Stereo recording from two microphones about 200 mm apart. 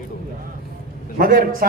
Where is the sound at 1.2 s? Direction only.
45° right (ahead or behind).